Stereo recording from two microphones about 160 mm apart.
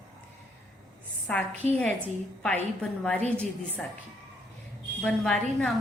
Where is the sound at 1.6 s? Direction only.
45° right (ahead or behind).